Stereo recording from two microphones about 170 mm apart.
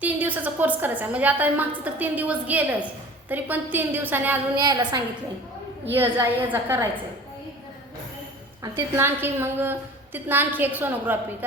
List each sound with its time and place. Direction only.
0.0 s a woman's voice: 10° right (ahead or behind)
4.5 s a woman's voice: 25° right (ahead or behind)
5.9 s a woman's voice: 10° right (ahead or behind)
8.6 s a woman's voice: 15° right (ahead or behind)